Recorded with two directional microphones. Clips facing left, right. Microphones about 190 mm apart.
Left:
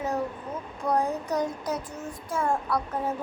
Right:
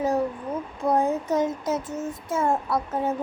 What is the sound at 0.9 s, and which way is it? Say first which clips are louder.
Child singing: right 4 dB; 25° right (ahead or behind).